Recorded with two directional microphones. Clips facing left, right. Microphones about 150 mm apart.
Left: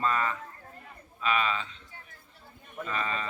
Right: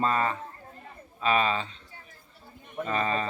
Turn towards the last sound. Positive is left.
turn(degrees=-40)  # may be behind; listen again after turning